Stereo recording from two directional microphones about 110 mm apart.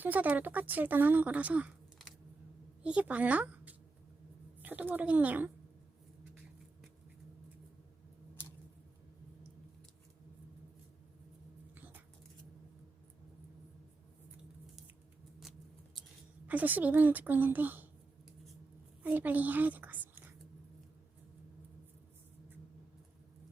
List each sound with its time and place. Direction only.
0.0 s a woman's voice: 15° right (ahead or behind)
2.8 s a woman's voice: 10° right (ahead or behind)
11.7 s cat: 15° right (ahead or behind)
16.5 s a woman's voice: 15° right (ahead or behind)
19.0 s a woman's voice: 15° right (ahead or behind)